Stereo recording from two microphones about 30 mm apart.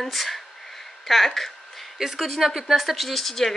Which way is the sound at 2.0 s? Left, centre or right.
Centre.